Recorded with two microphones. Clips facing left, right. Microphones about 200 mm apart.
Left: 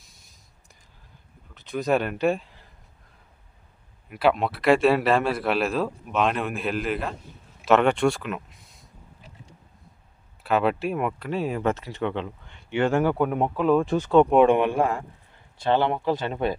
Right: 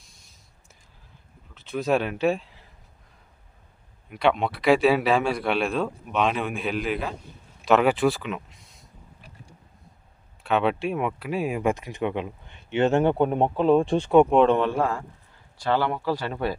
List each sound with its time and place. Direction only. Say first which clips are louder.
0.0 s a sound: even; centre (ahead or behind)
1.5 s speech: even; centre (ahead or behind)
4.1 s speech: left 1 dB; 5° left (ahead or behind)
10.4 s speech: even; centre (ahead or behind); by 14.1 s 30° right (ahead or behind)
14.3 s speech: left 1 dB; 10° left (ahead or behind)